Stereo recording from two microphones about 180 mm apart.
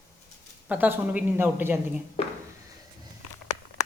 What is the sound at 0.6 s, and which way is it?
A woman's voice, 10° right (ahead or behind).